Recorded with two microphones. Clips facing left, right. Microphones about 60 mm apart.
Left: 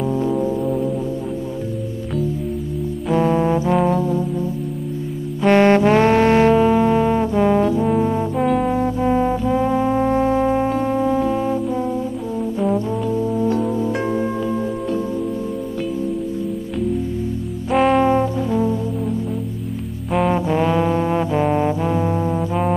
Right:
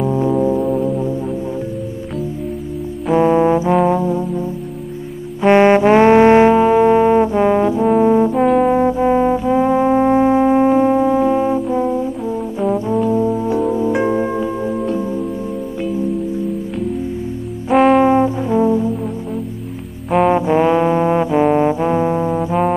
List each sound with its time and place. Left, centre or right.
0.0 s music: centre
3.1 s brass instrument: centre
5.4 s music: centre
8.4 s brass instrument: centre
8.6 s brass instrument: right
13.1 s singing bowl: centre
17.7 s trombone: centre
18.0 s brass instrument: centre
20.2 s trombone: centre